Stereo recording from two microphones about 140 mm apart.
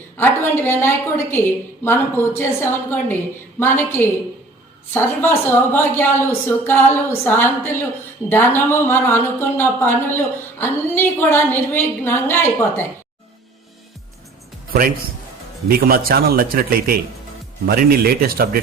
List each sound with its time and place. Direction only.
0.2 s a woman's voice: 15° left (ahead or behind)
15.7 s a man's voice: 90° right